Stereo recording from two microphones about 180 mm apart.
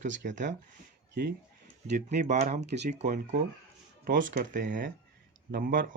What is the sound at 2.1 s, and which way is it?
Speech, 40° right (ahead or behind).